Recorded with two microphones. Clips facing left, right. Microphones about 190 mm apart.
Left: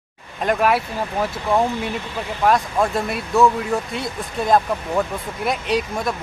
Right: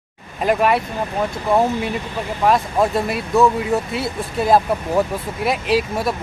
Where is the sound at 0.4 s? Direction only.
Centre (ahead or behind).